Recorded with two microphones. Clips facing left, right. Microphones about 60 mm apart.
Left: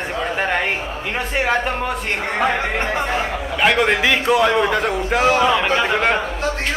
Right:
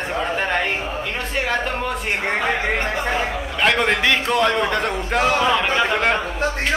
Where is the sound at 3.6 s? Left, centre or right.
Centre.